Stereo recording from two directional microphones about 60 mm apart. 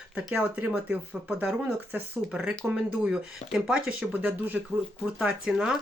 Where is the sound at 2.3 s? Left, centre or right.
Centre.